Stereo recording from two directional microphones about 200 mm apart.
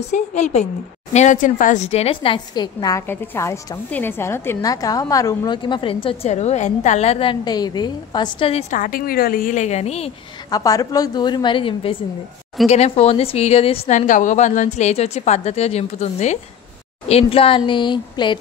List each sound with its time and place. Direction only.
0.0 s a woman's voice: 35° left (ahead or behind)
10.5 s a woman's voice: 15° left (ahead or behind)